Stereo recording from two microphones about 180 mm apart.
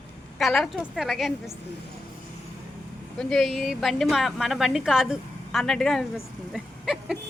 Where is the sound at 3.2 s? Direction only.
Centre (ahead or behind).